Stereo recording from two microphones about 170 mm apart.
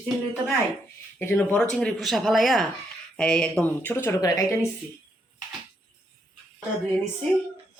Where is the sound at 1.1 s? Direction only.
10° left (ahead or behind).